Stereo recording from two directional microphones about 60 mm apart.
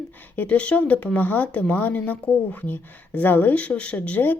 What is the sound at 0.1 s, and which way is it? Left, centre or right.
Speech, left.